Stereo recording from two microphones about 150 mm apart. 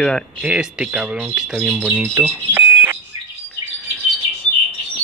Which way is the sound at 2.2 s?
15° right (ahead or behind).